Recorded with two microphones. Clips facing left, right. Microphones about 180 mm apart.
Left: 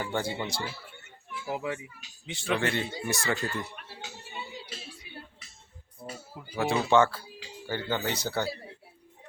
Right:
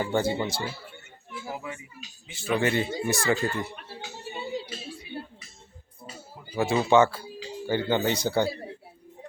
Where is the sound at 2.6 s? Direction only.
5° right (ahead or behind).